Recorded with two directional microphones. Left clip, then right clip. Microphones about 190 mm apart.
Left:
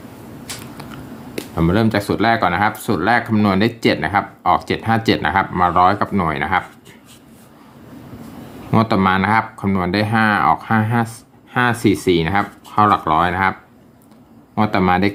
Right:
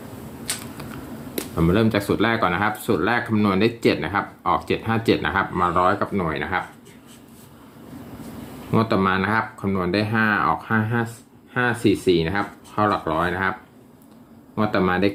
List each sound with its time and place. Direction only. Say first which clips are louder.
1.5 s speech: left 3 dB; 20° left (ahead or behind)
8.7 s speech: left 4 dB; 25° left (ahead or behind)